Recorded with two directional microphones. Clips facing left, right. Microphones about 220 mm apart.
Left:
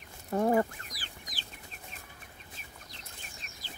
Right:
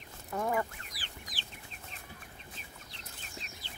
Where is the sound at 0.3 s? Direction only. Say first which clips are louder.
Left 6 dB; 35° left (ahead or behind).